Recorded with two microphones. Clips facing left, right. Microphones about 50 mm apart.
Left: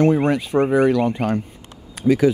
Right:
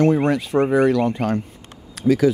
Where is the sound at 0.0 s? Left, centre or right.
Centre.